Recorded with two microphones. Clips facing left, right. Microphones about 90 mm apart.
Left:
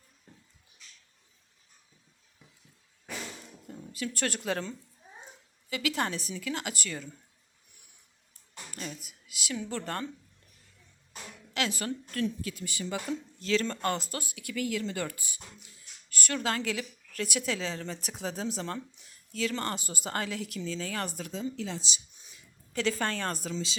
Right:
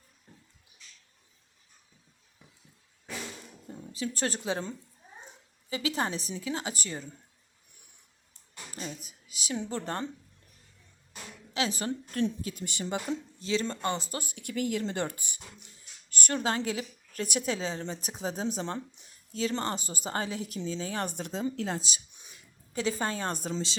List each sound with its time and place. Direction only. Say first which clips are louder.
0.3 s a sound: even; centre (ahead or behind)
3.9 s a woman's voice: right 1 dB; 30° right (ahead or behind)
5.7 s a woman's voice: even; 30° right (ahead or behind)
8.3 s a sound: even; 25° right (ahead or behind)
9.0 s a woman's voice: left 1 dB; 35° right (ahead or behind)
11.5 s a woman's voice: right 1 dB; 30° right (ahead or behind)
13.4 s speech: left 2 dB; 5° right (ahead or behind)
14.1 s a woman's voice: right 1 dB; 25° right (ahead or behind)
21.5 s speech: right 3 dB; 45° right (ahead or behind)
23.0 s a woman's voice: even; 15° right (ahead or behind)
23.3 s speech: right 2 dB; 35° right (ahead or behind)